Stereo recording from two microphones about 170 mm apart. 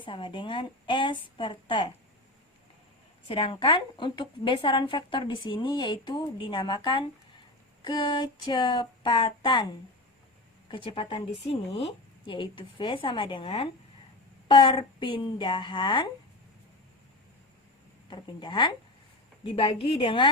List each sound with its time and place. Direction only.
0.0 s a woman's voice: 30° left (ahead or behind)
3.2 s a woman's voice: 30° left (ahead or behind)
10.7 s a woman's voice: 30° left (ahead or behind)
18.1 s a woman's voice: 25° left (ahead or behind)